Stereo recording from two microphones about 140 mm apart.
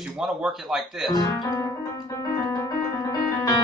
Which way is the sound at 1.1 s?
30° left (ahead or behind).